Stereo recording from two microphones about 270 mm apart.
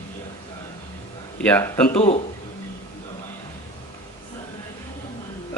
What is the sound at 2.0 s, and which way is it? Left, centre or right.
Speech, left.